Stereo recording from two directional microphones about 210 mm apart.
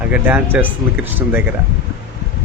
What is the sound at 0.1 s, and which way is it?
Speech, 10° right (ahead or behind).